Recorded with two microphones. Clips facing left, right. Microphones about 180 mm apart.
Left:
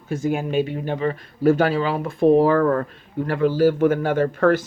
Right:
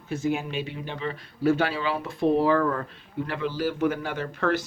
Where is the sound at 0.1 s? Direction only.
50° left (ahead or behind).